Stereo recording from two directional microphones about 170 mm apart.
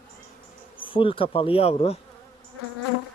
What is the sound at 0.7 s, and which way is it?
Bee, 30° left (ahead or behind).